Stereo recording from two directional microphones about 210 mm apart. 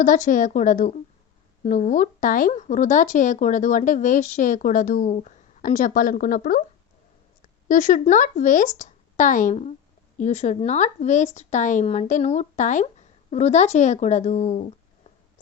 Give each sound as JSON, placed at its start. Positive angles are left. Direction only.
{"t": 0.0, "sound": "speech", "side_deg": 40}
{"t": 7.7, "sound": "speech", "side_deg": 35}